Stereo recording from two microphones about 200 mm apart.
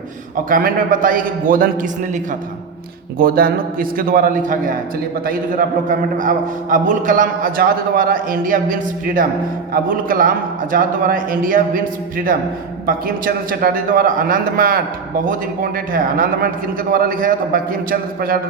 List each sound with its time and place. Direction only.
0.5 s a man's voice: 45° right (ahead or behind)
3.2 s a man's voice: 45° right (ahead or behind)
15.9 s a man's voice: 45° right (ahead or behind)